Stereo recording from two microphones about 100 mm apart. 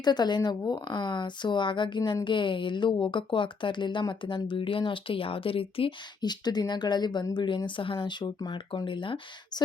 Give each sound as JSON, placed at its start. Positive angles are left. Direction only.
{"t": 0.0, "sound": "speech", "side_deg": 45}
{"t": 6.2, "sound": "speech", "side_deg": 45}